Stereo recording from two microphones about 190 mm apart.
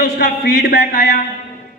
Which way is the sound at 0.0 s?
60° left (ahead or behind).